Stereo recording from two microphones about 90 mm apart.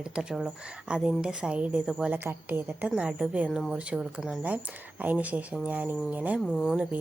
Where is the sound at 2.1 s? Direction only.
25° right (ahead or behind).